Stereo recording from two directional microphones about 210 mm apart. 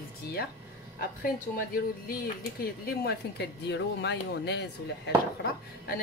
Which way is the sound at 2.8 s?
50° left (ahead or behind).